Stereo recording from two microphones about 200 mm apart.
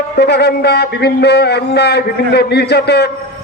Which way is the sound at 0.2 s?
55° left (ahead or behind).